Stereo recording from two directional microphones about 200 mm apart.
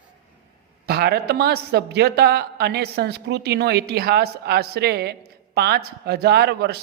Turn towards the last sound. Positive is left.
turn(degrees=-55)  # may be behind; listen again after turning